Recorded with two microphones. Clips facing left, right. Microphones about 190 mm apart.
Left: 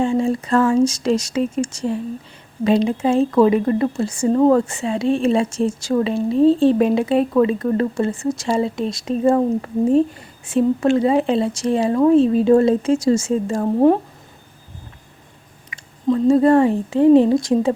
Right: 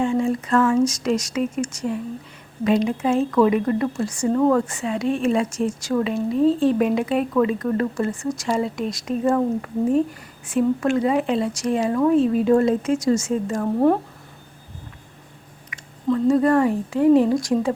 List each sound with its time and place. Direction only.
0.0 s speech: 30° left (ahead or behind)
16.0 s speech: 20° left (ahead or behind)